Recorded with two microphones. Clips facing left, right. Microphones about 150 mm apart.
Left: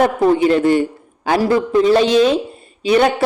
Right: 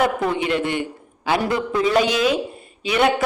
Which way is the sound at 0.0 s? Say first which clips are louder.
Left 7 dB; 35° left (ahead or behind).